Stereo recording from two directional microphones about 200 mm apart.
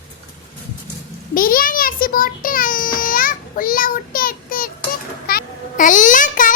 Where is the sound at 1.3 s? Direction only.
45° left (ahead or behind).